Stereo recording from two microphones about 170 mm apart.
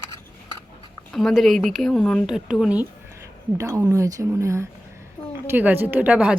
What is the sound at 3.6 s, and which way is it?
Speech, 20° right (ahead or behind).